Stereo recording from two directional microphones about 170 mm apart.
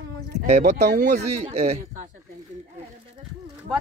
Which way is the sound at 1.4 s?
40° right (ahead or behind).